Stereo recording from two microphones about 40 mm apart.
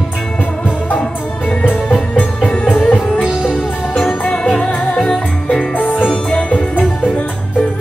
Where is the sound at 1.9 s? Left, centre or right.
Left.